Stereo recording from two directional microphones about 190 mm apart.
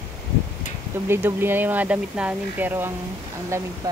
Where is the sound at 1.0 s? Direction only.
10° right (ahead or behind).